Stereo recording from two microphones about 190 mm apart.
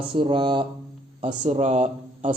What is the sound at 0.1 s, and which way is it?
Speech, 25° right (ahead or behind).